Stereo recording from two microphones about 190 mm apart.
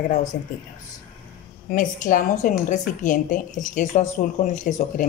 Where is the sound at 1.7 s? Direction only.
45° left (ahead or behind).